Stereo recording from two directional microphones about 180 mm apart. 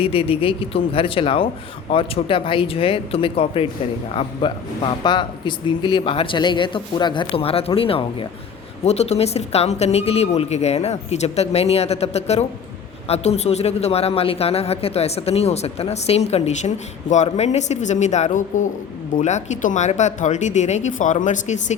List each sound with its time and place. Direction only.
0.0 s a man's voice: 30° left (ahead or behind)